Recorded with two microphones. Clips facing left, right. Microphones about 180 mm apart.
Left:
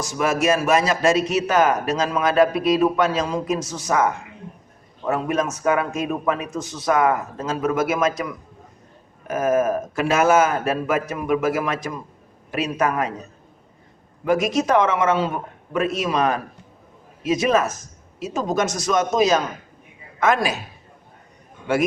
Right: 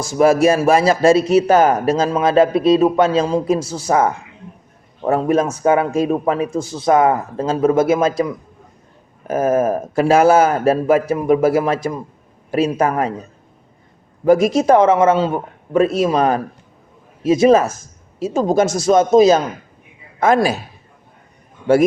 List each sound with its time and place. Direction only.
0.0 s a man's voice: 30° right (ahead or behind)
14.3 s a man's voice: 30° right (ahead or behind)